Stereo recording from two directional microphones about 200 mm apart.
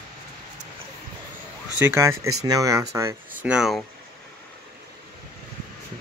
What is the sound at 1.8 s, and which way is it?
Speech, 10° right (ahead or behind).